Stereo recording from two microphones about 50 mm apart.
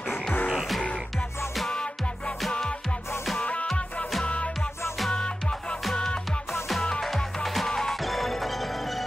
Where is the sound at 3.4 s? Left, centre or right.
Left.